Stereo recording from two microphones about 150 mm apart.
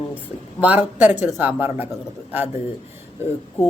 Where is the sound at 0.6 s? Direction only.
10° right (ahead or behind).